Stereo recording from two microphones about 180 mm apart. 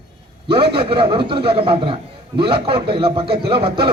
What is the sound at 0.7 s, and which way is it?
A man's voice, 30° right (ahead or behind).